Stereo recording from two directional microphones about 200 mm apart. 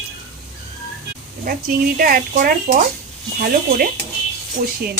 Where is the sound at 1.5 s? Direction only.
45° right (ahead or behind).